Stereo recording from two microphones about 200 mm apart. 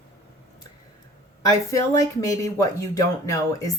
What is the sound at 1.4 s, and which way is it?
Speech, 15° left (ahead or behind).